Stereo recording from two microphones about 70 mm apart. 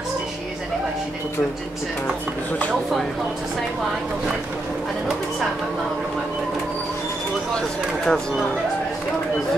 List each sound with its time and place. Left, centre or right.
7.5 s speech: centre